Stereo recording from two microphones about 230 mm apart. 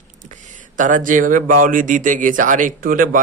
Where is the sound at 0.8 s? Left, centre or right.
Right.